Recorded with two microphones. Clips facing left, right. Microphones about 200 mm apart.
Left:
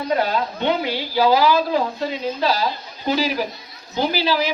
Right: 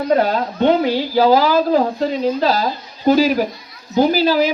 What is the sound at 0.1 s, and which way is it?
A woman's voice, 40° right (ahead or behind).